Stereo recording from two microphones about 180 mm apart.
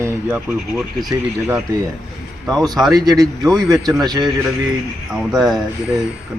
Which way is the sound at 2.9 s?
20° right (ahead or behind).